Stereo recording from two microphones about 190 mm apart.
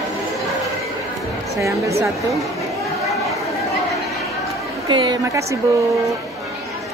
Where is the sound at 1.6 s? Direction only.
15° right (ahead or behind).